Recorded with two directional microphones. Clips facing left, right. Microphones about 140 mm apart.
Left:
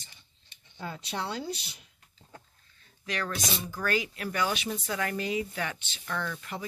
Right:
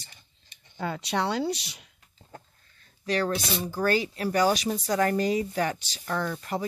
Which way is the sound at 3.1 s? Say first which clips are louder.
Right 6 dB; 35° right (ahead or behind).